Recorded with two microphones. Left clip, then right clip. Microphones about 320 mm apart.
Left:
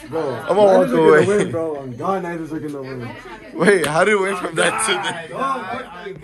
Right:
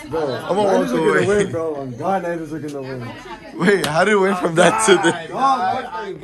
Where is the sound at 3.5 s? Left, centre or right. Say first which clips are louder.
Left 1 dB; centre; by 5.1 s right.